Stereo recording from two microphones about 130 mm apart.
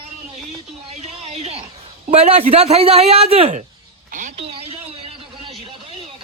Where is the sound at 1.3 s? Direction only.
50° right (ahead or behind).